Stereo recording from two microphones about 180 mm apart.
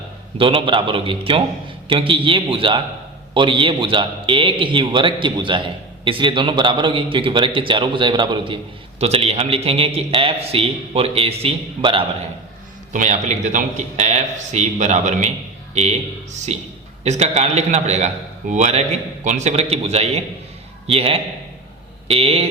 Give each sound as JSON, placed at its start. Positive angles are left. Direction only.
{"t": 0.3, "sound": "a man's voice", "side_deg": -30}
{"t": 9.0, "sound": "a man's voice", "side_deg": -35}
{"t": 12.9, "sound": "a man's voice", "side_deg": -45}